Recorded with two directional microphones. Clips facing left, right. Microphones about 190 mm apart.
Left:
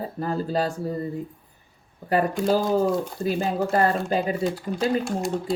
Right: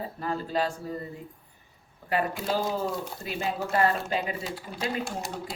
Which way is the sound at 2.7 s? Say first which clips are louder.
Left 9 dB; 40° left (ahead or behind).